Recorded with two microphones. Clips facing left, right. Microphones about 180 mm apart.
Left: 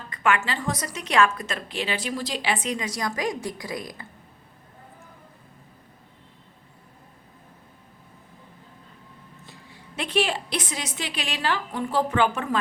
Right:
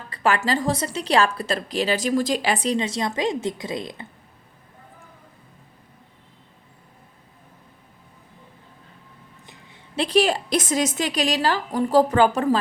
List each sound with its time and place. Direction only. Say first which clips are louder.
0.1 s a woman's voice: right 3 dB; 35° right (ahead or behind)
9.9 s a woman's voice: right 6 dB; 35° right (ahead or behind)